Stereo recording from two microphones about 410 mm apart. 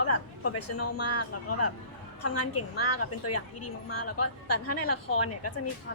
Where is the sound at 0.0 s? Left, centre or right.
Left.